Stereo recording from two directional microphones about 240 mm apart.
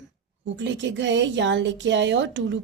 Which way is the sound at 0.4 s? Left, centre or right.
Right.